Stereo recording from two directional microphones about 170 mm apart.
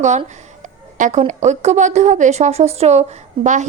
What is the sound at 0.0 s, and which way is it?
A woman's voice, 45° right (ahead or behind).